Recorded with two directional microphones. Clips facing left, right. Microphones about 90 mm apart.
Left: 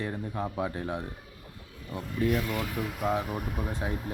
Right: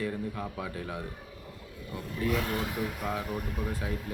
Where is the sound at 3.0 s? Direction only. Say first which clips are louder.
Left 4 dB; 20° left (ahead or behind).